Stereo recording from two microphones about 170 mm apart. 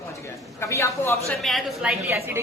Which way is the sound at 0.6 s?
15° left (ahead or behind).